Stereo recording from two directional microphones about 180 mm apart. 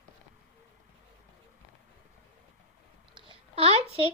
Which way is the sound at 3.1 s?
30° right (ahead or behind).